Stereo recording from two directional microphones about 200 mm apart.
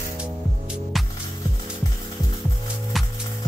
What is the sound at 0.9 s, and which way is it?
Music, centre (ahead or behind).